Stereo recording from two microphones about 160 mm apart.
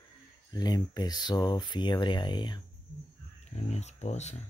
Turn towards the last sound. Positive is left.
turn(degrees=45)  # may be behind; listen again after turning